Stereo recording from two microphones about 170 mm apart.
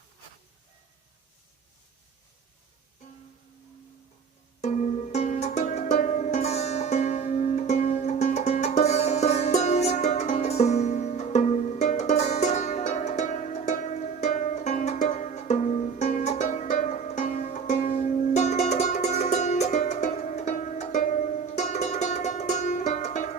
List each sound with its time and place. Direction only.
4.6 s music: 45° left (ahead or behind)